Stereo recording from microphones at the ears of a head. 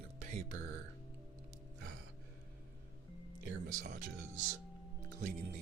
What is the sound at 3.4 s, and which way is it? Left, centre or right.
Speech, right.